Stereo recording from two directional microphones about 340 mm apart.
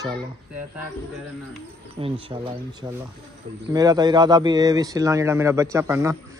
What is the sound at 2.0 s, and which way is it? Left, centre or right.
Speech, centre.